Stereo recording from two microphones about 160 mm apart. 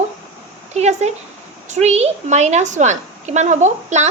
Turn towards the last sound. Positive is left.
turn(degrees=-45)  # may be behind; listen again after turning